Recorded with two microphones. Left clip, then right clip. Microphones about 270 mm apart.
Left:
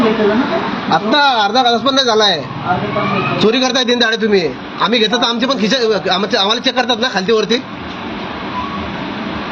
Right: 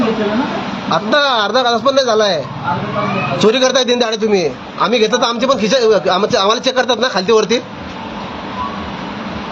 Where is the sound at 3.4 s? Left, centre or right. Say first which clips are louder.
Right 3 dB; centre.